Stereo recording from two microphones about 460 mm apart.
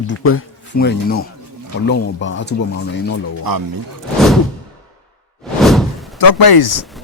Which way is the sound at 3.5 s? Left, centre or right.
Right.